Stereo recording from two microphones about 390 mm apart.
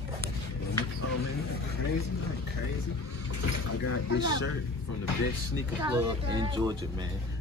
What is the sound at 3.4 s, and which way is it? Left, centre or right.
Speech, left.